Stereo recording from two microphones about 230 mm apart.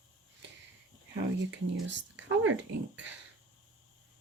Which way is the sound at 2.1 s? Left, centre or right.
Right.